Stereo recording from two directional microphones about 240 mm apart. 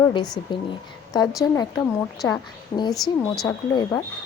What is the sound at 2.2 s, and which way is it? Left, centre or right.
A woman's voice, centre.